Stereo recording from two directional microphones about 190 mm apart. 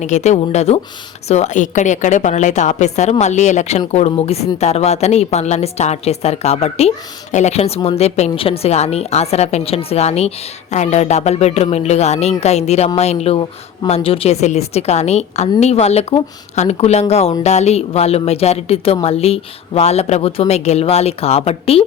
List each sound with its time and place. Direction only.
0.0 s a woman's voice: 40° left (ahead or behind)